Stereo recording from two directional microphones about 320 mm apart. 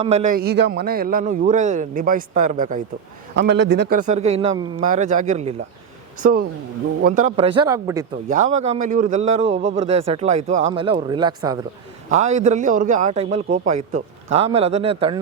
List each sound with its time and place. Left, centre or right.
0.0 s a man's voice: right
8.3 s a man's voice: right